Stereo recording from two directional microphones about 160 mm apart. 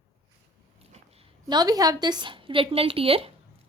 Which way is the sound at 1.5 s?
25° right (ahead or behind).